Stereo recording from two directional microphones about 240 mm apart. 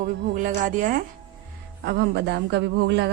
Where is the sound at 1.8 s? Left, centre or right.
Right.